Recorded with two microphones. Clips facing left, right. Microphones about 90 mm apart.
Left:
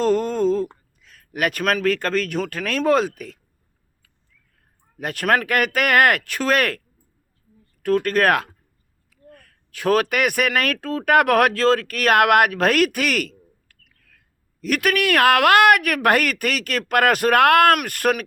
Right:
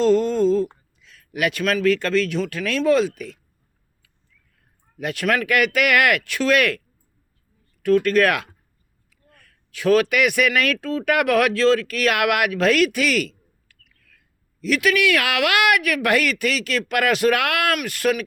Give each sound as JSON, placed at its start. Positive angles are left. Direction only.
{"t": 0.0, "sound": "speech", "side_deg": 45}
{"t": 4.9, "sound": "a man's voice", "side_deg": 45}